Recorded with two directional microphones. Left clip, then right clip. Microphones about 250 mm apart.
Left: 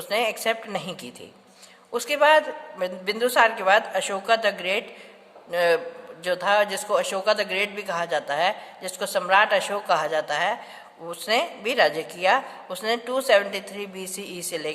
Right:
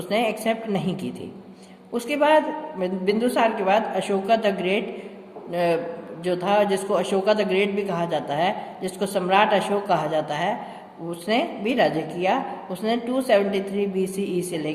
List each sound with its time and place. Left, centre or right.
0.1 s a man's voice: left